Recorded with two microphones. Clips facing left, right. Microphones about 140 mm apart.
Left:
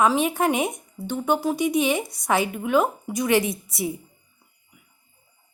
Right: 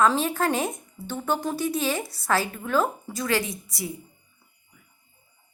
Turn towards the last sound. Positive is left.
turn(degrees=25)  # may be behind; listen again after turning